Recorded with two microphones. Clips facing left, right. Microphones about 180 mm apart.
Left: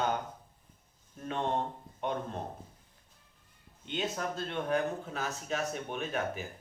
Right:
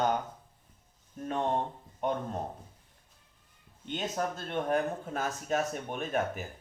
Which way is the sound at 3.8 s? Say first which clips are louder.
Right 2 dB; 45° right (ahead or behind).